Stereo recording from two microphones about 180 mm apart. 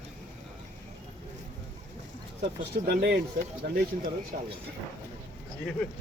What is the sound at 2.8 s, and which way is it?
Speech, 60° right (ahead or behind).